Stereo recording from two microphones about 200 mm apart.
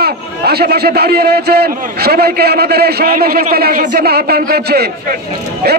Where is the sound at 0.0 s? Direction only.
50° right (ahead or behind).